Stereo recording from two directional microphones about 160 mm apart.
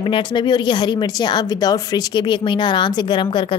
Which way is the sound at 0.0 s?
30° left (ahead or behind).